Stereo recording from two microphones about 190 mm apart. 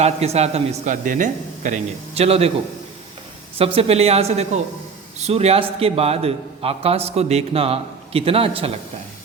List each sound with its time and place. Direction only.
0.0 s a man's voice: 35° right (ahead or behind)
3.6 s a man's voice: 30° right (ahead or behind)